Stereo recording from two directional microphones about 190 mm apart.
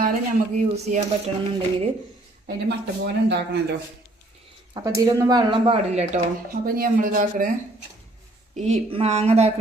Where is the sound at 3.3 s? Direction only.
60° right (ahead or behind).